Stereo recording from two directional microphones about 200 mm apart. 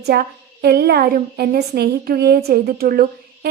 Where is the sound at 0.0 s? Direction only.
55° right (ahead or behind).